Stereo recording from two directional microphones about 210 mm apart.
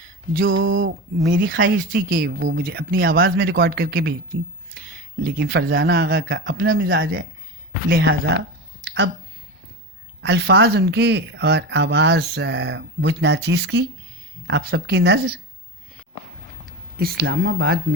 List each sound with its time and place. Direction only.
0.4 s a sound: 70° right (ahead or behind)
1.5 s speech: 65° right (ahead or behind)
1.9 s speech: 40° right (ahead or behind)
5.2 s speech: 50° right (ahead or behind)
6.2 s speech: 65° right (ahead or behind)
7.9 s speech: 50° right (ahead or behind)
10.2 s speech: 55° right (ahead or behind)
17.0 s speech: 45° right (ahead or behind)